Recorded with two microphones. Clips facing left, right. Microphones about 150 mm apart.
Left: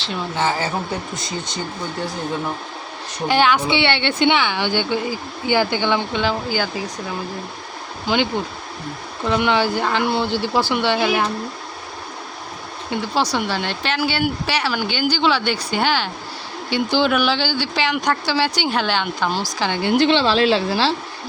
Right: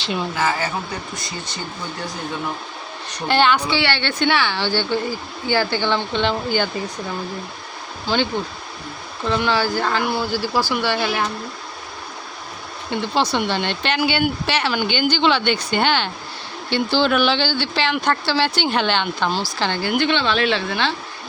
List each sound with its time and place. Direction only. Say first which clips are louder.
0.3 s speech: left 3 dB; 25° left (ahead or behind)
3.2 s speech: even; 10° left (ahead or behind)
3.7 s speech: left 2 dB; 20° left (ahead or behind); by 6.8 s 5° left (ahead or behind)
8.0 s speech: left 1 dB; 15° left (ahead or behind)
12.9 s speech: even; 5° left (ahead or behind)
19.8 s a woman's voice: left 5 dB; 30° left (ahead or behind)